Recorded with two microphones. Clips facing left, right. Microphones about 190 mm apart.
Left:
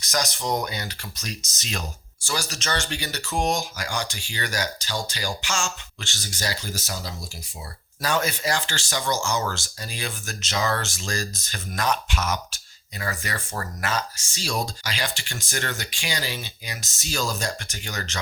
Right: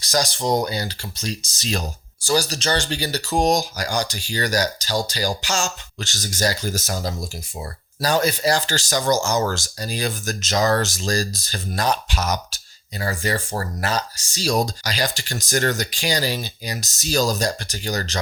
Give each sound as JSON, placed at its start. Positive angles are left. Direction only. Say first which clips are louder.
{"t": 0.0, "sound": "speech", "louder": "right 5 dB", "side_deg": -35}